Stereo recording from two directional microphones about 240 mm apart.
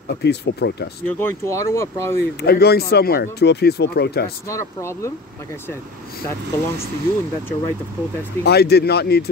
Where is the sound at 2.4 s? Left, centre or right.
Left.